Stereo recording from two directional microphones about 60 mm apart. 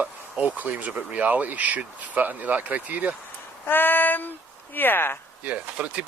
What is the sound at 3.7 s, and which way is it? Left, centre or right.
Female singing, left.